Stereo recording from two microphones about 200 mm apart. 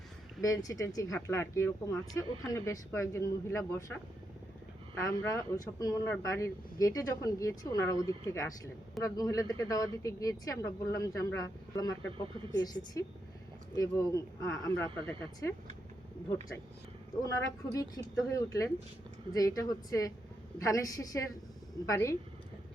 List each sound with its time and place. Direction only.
0.4 s speech: 15° left (ahead or behind)
17.2 s speech: 15° left (ahead or behind)